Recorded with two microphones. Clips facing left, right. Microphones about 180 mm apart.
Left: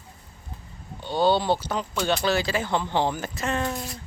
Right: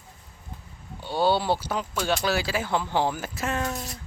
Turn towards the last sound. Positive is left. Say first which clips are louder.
# left 1 dB
turn(degrees=-5)  # may be behind; listen again after turning